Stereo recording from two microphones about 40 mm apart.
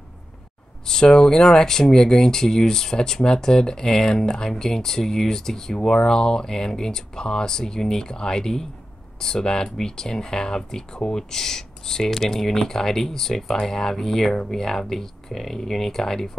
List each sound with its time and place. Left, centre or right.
0.8 s speech: centre